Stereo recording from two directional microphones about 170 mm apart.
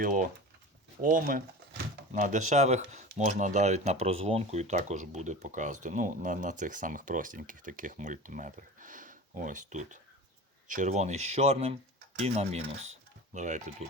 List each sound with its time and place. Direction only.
0.0 s speech: 55° right (ahead or behind)